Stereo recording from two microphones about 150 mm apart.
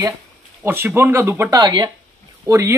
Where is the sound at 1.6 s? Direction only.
30° right (ahead or behind).